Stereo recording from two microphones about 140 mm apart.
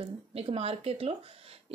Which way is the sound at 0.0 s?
45° right (ahead or behind).